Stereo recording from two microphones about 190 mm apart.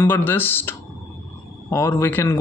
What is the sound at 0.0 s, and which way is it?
Speech, 10° left (ahead or behind).